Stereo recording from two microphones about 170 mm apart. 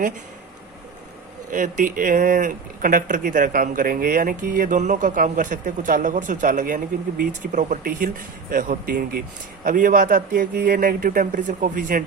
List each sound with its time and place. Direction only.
1.5 s speech: 50° right (ahead or behind)